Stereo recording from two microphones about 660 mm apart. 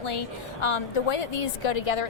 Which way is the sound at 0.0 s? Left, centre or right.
Left.